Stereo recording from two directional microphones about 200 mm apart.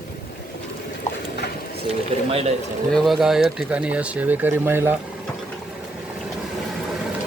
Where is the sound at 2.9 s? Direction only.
Centre (ahead or behind).